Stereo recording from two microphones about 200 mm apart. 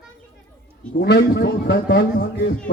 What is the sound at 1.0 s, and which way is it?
A man's voice, 55° left (ahead or behind).